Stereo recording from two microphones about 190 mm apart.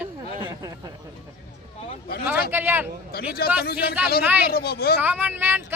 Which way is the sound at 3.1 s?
55° left (ahead or behind).